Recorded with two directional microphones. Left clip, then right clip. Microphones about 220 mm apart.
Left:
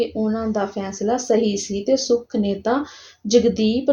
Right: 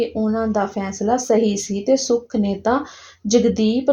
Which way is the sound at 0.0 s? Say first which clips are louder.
Right 2 dB; 30° right (ahead or behind).